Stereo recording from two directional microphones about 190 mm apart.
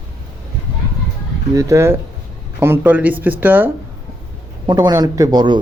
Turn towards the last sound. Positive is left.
turn(degrees=-25)  # may be behind; listen again after turning